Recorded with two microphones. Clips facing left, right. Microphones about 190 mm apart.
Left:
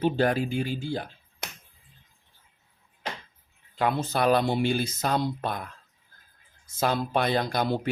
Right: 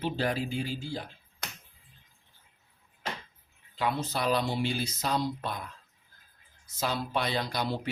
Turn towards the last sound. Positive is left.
turn(degrees=50)  # may be behind; listen again after turning